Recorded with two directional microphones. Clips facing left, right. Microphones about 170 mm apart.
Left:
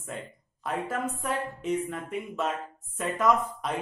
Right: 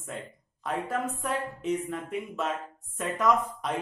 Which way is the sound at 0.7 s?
Centre (ahead or behind).